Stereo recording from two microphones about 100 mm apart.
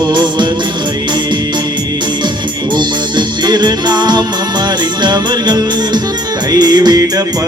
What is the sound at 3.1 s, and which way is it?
Music, 45° right (ahead or behind).